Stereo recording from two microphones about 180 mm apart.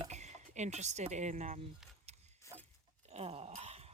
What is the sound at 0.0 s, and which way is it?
Speech, 40° right (ahead or behind).